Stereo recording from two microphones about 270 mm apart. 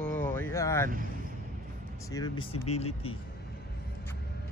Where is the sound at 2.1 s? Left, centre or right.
Centre.